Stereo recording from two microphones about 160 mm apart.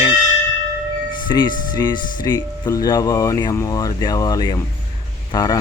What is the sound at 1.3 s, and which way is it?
Speech, 25° left (ahead or behind).